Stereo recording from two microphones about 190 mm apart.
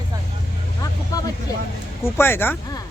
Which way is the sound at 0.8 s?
20° left (ahead or behind).